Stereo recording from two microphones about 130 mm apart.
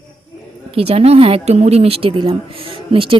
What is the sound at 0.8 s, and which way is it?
Speech, 50° right (ahead or behind).